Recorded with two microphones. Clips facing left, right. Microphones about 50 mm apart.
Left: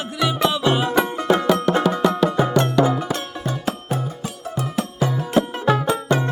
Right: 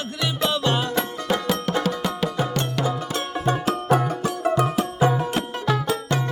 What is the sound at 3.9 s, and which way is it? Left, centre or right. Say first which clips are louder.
Music: right 6 dB; right.